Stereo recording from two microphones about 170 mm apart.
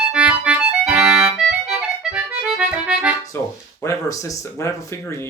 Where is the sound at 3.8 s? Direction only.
15° left (ahead or behind).